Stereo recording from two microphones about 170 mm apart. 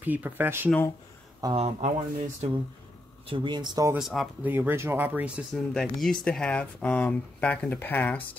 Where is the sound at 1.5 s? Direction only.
35° right (ahead or behind).